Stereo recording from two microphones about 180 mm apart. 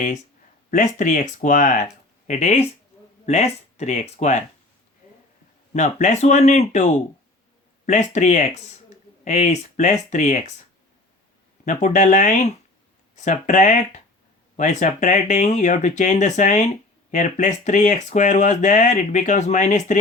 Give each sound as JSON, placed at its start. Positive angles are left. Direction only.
{"t": 0.7, "sound": "speech", "side_deg": 45}
{"t": 5.7, "sound": "speech", "side_deg": 40}
{"t": 11.6, "sound": "speech", "side_deg": 45}